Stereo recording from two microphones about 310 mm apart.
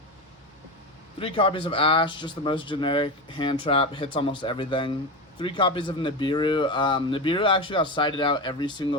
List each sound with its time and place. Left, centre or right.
1.2 s speech: centre